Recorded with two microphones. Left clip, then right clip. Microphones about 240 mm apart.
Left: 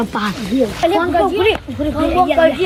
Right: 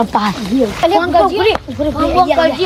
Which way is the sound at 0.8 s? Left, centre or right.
Right.